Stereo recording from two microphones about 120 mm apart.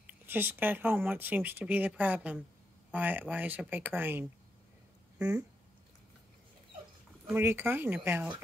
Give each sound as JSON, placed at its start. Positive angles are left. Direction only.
{"t": 0.0, "sound": "speech", "side_deg": -15}
{"t": 7.3, "sound": "speech", "side_deg": -20}